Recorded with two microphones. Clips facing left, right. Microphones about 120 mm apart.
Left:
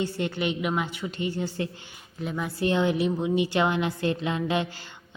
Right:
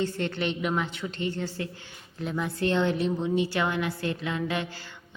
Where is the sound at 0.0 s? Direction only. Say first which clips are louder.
Left 1 dB; 10° left (ahead or behind).